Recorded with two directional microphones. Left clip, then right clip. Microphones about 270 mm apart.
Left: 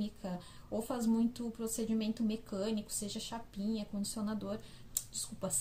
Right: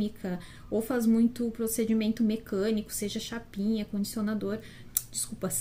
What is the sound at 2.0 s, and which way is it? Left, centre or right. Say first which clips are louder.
Speech: right 8 dB; left.